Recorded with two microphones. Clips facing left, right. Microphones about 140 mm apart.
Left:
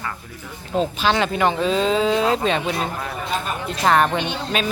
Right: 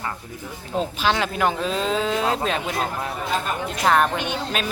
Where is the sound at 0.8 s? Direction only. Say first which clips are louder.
Left 3 dB; 5° right (ahead or behind).